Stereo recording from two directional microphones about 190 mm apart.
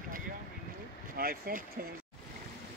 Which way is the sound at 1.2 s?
50° right (ahead or behind).